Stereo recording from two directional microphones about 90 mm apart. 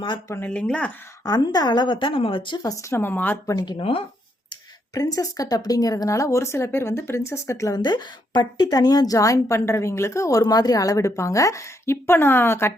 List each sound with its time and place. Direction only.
0.4 s speech: 15° left (ahead or behind)
1.2 s a woman's voice: 45° left (ahead or behind); by 2.6 s 75° left (ahead or behind)
2.6 s speech: 45° left (ahead or behind)
3.0 s a woman's voice: 20° left (ahead or behind)
3.4 s speech: 45° left (ahead or behind)
3.8 s speech: 90° left
4.9 s a woman's voice: 40° left (ahead or behind)
7.8 s a woman's voice: 50° left (ahead or behind); by 12.7 s 25° left (ahead or behind)